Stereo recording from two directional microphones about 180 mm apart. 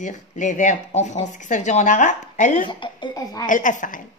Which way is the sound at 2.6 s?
25° left (ahead or behind).